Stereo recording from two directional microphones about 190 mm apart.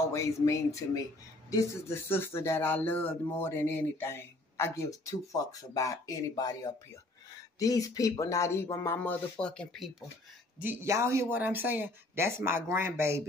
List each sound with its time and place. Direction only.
0.1 s speech: 15° left (ahead or behind); by 10.0 s centre (ahead or behind)
10.6 s speech: 10° right (ahead or behind)